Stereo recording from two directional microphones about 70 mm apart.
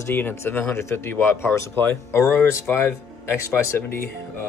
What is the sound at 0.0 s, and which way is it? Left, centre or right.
Speech, left.